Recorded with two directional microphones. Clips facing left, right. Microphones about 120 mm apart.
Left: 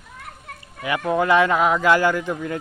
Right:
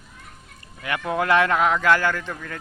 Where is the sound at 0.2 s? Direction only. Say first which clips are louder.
Left 9 dB; 65° left (ahead or behind).